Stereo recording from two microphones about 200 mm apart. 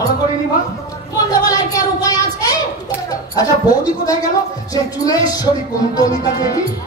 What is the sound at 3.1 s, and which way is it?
Speech, 20° left (ahead or behind).